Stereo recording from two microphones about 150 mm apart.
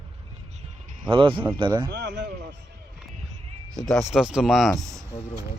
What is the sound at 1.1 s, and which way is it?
Speech, 35° right (ahead or behind).